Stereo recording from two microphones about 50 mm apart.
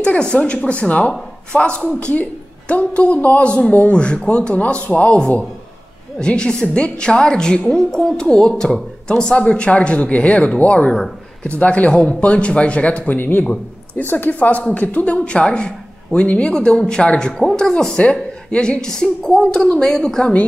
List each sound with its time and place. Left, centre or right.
0.0 s a woman's voice: left
6.1 s a woman's voice: centre
17.0 s a woman's voice: left
17.3 s a woman's voice: centre